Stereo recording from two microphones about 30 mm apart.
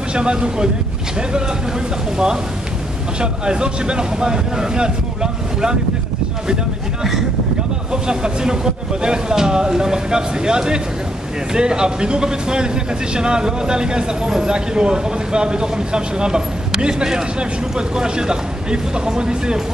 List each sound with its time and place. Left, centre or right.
0.1 s speech: right
3.2 s speech: right
7.0 s speech: centre
7.9 s speech: right